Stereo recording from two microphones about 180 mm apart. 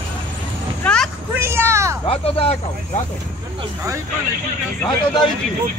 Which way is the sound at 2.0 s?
35° left (ahead or behind).